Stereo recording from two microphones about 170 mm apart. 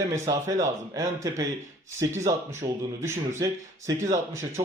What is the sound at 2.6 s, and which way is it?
A man's voice, 20° right (ahead or behind).